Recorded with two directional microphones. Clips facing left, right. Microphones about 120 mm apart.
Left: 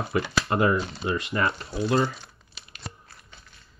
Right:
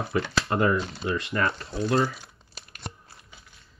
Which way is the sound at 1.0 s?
25° left (ahead or behind).